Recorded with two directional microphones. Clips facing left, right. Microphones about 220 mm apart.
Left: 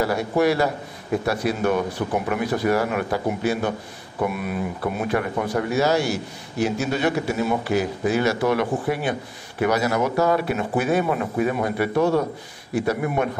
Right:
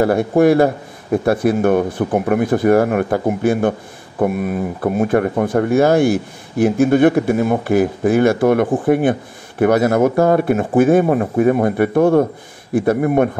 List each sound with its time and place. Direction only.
0.0 s speech: 50° right (ahead or behind)